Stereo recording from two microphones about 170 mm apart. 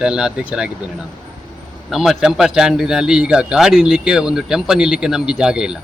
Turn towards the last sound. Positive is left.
turn(degrees=-5)  # may be behind; listen again after turning